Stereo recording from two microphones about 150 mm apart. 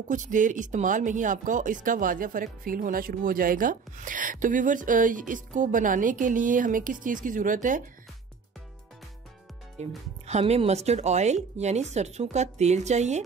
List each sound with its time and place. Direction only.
0.1 s speech: 60° right (ahead or behind)
9.8 s speech: 45° right (ahead or behind)